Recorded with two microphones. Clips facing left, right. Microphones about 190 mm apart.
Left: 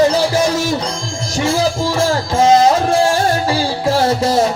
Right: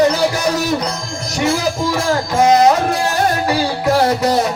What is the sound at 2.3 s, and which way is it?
Music, 30° left (ahead or behind).